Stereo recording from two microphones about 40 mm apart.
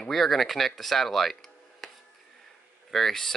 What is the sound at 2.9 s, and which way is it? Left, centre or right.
Speech, centre.